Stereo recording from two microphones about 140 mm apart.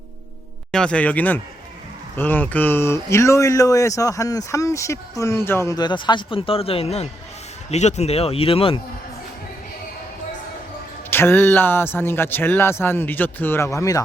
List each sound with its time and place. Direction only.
0.7 s a man's voice: 5° left (ahead or behind); by 8.8 s 40° left (ahead or behind)
11.1 s a man's voice: 15° left (ahead or behind)